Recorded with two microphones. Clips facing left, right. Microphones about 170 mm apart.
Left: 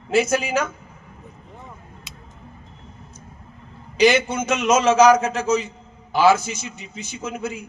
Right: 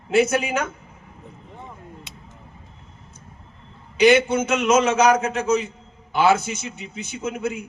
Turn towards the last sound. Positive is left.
turn(degrees=-60)  # may be behind; listen again after turning